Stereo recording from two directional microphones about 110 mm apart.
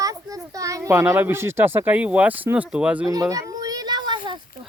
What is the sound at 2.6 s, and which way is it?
Speech, 10° right (ahead or behind).